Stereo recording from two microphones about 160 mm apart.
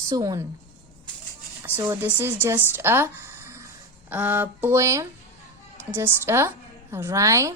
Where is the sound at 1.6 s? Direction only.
15° right (ahead or behind).